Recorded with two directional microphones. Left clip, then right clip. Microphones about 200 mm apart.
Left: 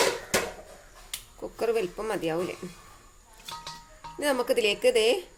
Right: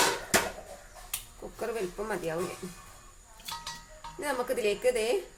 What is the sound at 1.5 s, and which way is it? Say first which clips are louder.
Speech: left 6 dB; 45° left (ahead or behind).